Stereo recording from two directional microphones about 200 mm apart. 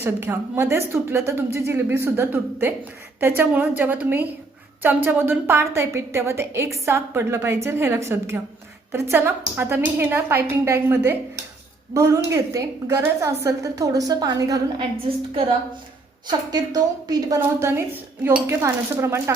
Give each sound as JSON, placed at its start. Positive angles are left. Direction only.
{"t": 0.0, "sound": "a woman's voice", "side_deg": -10}